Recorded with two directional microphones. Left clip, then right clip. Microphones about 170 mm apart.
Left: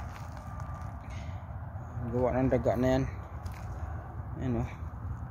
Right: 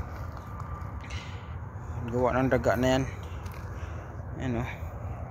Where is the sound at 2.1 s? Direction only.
5° left (ahead or behind).